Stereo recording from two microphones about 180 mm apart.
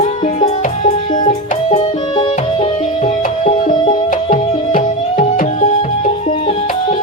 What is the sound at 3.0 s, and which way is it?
Music, 40° left (ahead or behind).